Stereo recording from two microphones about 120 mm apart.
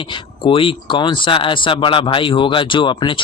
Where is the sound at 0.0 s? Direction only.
45° left (ahead or behind).